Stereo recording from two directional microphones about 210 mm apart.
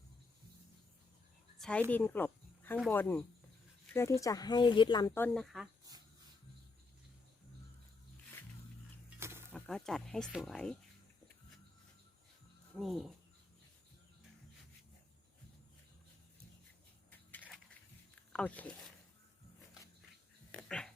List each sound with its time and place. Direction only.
1.5 s a sound: 5° left (ahead or behind)
1.9 s speech: 10° left (ahead or behind)
9.0 s a sound: 10° right (ahead or behind)
9.5 s speech: 5° left (ahead or behind)
12.8 s speech: centre (ahead or behind)
18.3 s speech: 5° left (ahead or behind)
20.5 s dog: 5° left (ahead or behind)